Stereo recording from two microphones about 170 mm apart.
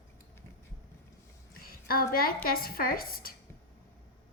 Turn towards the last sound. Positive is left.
turn(degrees=60)  # may be behind; listen again after turning